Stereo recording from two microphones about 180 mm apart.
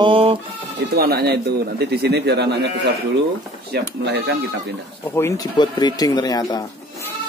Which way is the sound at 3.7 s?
65° right (ahead or behind).